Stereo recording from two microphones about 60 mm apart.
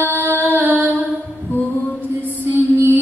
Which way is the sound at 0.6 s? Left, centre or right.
Right.